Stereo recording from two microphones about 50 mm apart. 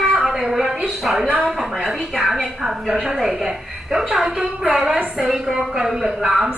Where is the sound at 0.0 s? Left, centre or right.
Centre.